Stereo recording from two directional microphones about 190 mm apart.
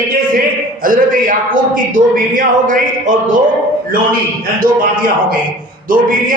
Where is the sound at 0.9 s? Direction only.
45° right (ahead or behind).